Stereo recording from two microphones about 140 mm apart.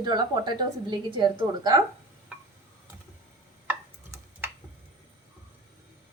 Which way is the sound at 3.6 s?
15° right (ahead or behind).